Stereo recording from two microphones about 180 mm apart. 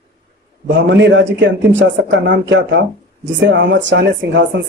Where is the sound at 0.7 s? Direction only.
90° right.